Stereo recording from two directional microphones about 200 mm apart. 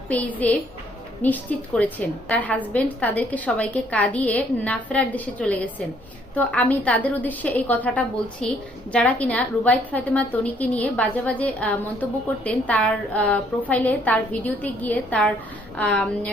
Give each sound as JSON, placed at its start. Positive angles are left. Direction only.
{"t": 0.1, "sound": "a woman's voice", "side_deg": 10}